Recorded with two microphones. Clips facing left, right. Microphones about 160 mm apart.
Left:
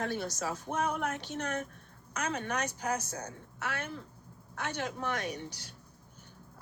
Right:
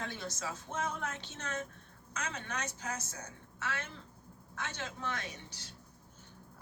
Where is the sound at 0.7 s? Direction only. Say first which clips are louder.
Left 5 dB; 60° left (ahead or behind).